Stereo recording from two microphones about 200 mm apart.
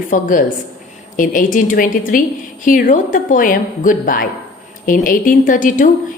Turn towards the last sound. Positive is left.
turn(degrees=40)  # may be behind; listen again after turning